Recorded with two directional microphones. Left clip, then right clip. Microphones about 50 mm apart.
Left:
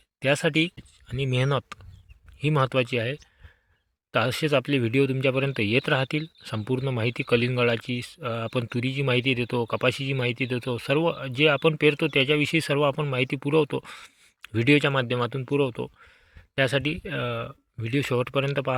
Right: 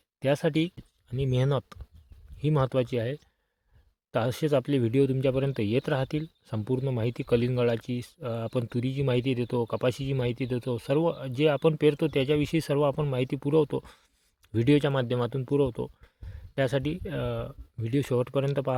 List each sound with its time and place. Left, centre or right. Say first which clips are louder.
0.2 s speech: left 3 dB; right